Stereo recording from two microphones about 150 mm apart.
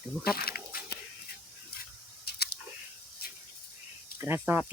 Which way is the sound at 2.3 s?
90° left.